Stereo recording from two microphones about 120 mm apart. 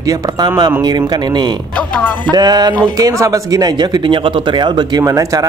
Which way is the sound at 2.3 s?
35° right (ahead or behind).